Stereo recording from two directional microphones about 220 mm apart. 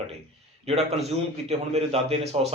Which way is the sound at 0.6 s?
25° right (ahead or behind).